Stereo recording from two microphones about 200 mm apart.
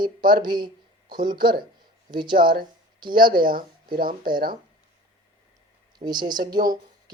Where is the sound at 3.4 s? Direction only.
45° right (ahead or behind).